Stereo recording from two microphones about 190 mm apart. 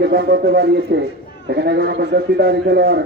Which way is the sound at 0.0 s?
55° right (ahead or behind).